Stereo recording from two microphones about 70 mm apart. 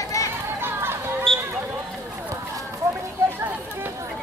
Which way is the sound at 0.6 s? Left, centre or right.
Right.